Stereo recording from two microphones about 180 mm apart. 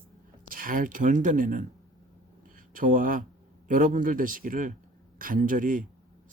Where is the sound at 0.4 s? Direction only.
50° right (ahead or behind).